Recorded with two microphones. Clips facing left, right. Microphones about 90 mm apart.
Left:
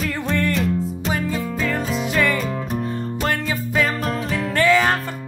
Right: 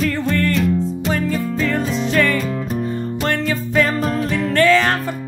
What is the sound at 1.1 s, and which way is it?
Music, 10° left (ahead or behind).